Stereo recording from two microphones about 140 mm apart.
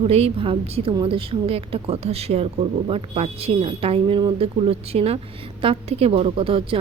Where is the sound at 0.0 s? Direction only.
45° right (ahead or behind).